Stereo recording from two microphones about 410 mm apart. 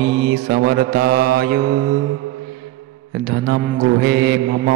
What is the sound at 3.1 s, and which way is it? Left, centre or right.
Mantra, right.